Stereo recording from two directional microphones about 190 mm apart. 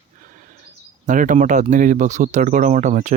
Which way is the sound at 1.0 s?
45° right (ahead or behind).